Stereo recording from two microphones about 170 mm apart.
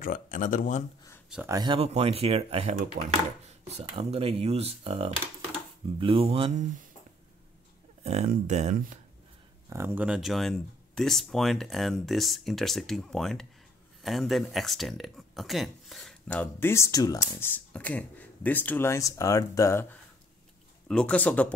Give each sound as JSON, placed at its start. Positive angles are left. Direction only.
{"t": 0.0, "sound": "speech", "side_deg": 50}
{"t": 1.5, "sound": "speech", "side_deg": -25}
{"t": 1.8, "sound": "speech", "side_deg": -35}
{"t": 8.0, "sound": "speech", "side_deg": -40}
{"t": 9.7, "sound": "speech", "side_deg": -15}